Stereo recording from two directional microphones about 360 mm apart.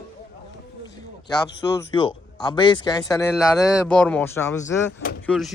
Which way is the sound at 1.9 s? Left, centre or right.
Centre.